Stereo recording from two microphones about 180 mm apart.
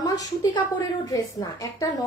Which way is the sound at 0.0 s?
20° left (ahead or behind).